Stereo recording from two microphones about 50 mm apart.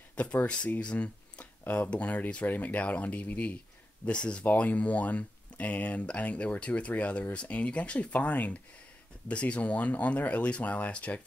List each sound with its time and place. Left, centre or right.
0.1 s a sound: left
0.7 s speech: left
4.0 s speech: left